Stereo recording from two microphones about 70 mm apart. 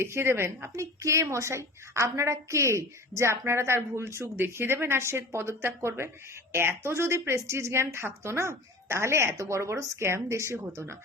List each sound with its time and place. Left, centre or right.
0.0 s a woman's voice: right